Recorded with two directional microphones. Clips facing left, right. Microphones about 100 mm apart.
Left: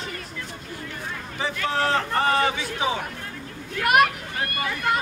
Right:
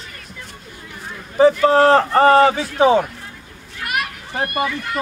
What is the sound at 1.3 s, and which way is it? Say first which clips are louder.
A man's voice: right 14 dB; 40° right (ahead or behind).